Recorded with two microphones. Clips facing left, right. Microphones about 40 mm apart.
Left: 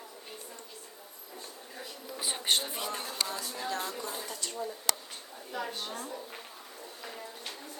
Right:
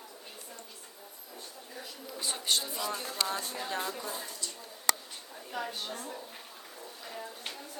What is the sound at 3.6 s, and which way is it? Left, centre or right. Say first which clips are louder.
Speech: left 1 dB; centre.